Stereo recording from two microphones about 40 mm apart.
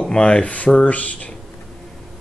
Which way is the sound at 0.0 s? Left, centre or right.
Left.